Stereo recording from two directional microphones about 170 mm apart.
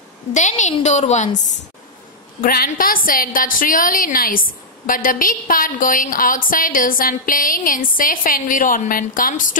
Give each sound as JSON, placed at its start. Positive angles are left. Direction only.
{"t": 0.3, "sound": "a woman's voice", "side_deg": 45}
{"t": 2.4, "sound": "a woman's voice", "side_deg": 60}